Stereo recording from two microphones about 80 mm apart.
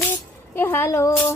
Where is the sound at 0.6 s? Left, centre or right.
Left.